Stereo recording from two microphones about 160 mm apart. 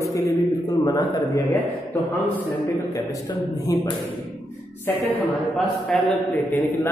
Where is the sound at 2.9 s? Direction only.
25° left (ahead or behind).